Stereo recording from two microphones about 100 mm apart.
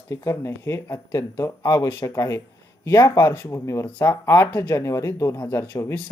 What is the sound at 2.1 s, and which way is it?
Speech, 30° left (ahead or behind).